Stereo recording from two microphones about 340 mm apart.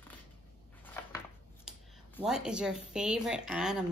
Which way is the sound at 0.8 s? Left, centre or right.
Centre.